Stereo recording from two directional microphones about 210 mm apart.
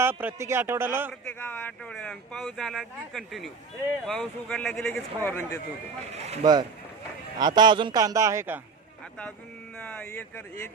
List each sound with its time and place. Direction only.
0.0 s a man's voice: 10° right (ahead or behind)
1.2 s speech: 5° left (ahead or behind)
6.1 s speech: 30° right (ahead or behind)
6.4 s a man's voice: 20° right (ahead or behind)
9.8 s speech: 5° left (ahead or behind)